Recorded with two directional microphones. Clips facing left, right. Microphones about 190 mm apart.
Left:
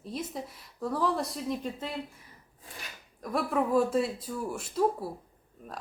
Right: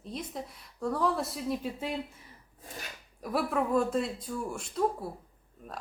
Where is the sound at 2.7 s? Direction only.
45° right (ahead or behind).